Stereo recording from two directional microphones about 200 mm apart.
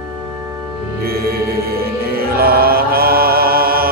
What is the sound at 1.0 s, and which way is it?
Music, 50° right (ahead or behind).